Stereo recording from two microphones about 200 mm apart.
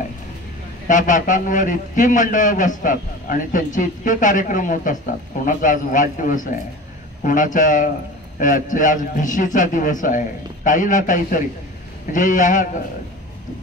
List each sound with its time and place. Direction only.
0.8 s a man's voice: 40° left (ahead or behind)